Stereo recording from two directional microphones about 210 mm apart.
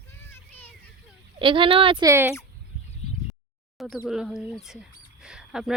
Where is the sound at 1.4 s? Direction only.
25° right (ahead or behind).